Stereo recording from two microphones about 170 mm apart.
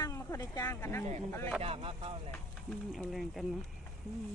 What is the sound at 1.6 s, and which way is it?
Speech, 35° right (ahead or behind).